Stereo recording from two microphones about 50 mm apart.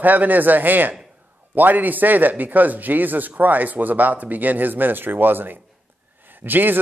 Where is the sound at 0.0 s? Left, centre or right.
Right.